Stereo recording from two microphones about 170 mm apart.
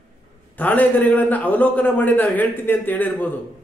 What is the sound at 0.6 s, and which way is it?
A man's voice, 10° left (ahead or behind).